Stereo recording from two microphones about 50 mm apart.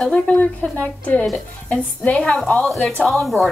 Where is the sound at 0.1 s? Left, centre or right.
Left.